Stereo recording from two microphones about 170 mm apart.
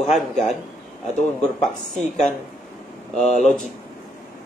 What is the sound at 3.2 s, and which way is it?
Speech, 45° left (ahead or behind).